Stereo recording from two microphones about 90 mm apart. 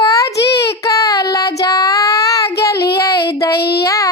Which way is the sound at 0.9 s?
40° left (ahead or behind).